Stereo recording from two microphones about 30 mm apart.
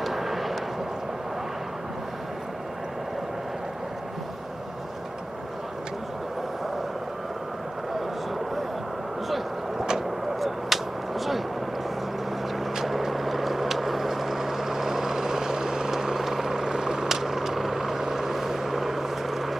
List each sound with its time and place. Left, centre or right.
0.0 s vehicle: centre
9.8 s vehicle: centre
10.4 s a sound: centre
12.8 s vehicle: centre